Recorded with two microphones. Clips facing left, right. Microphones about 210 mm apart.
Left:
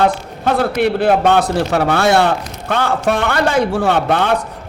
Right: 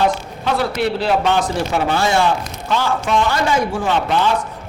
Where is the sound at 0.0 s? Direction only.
55° left (ahead or behind).